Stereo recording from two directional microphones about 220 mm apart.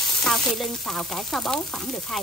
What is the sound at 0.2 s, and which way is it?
Frying, centre (ahead or behind).